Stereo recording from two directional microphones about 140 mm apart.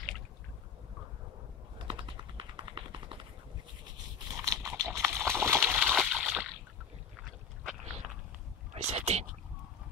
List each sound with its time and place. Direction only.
1.8 s typing: 35° right (ahead or behind)
4.4 s a sound: 20° right (ahead or behind)
4.9 s water: 15° right (ahead or behind)
8.7 s whispering: 50° right (ahead or behind)